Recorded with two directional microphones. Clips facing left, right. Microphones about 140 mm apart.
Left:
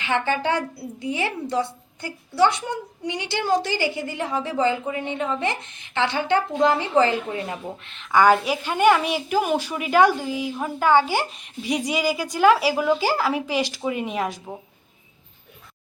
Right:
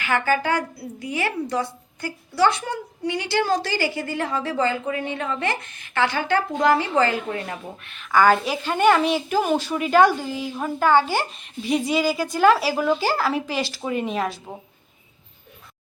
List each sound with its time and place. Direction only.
0.0 s a woman's voice: 25° left (ahead or behind)